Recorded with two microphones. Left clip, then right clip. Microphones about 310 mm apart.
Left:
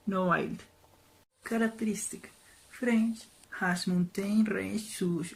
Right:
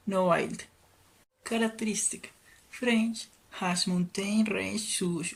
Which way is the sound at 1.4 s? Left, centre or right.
Centre.